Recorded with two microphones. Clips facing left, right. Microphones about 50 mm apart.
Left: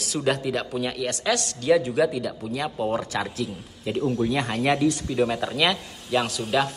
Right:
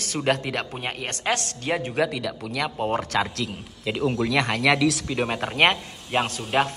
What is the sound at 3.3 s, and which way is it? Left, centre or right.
Speech, right.